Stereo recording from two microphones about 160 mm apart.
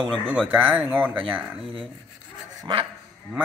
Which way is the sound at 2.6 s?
30° right (ahead or behind).